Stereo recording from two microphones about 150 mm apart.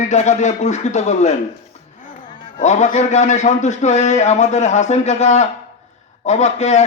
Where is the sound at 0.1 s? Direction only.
50° left (ahead or behind).